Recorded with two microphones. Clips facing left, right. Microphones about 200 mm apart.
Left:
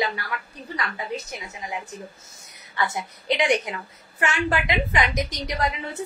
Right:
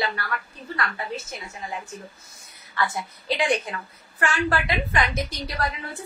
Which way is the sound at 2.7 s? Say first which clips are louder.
Even; 20° left (ahead or behind).